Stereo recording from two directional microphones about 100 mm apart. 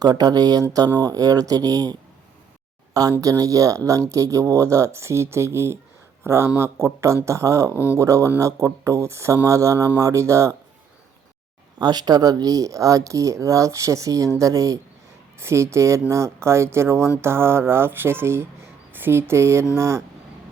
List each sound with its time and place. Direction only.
0.0 s speech: 40° right (ahead or behind)
11.8 s speech: 45° right (ahead or behind); by 20.0 s 25° right (ahead or behind)